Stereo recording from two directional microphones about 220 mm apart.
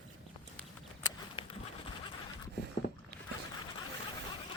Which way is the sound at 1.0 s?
25° left (ahead or behind).